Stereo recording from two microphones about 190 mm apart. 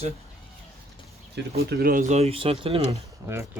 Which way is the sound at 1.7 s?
50° right (ahead or behind).